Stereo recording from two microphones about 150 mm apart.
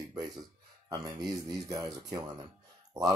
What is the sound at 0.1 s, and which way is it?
Speech, 25° right (ahead or behind).